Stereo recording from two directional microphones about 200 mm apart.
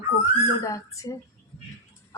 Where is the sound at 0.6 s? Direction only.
15° left (ahead or behind).